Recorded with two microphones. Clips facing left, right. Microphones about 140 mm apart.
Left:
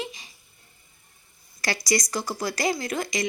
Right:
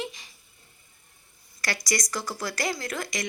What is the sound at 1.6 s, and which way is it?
Speech, 25° left (ahead or behind).